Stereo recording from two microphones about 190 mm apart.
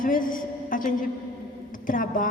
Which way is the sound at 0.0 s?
45° left (ahead or behind).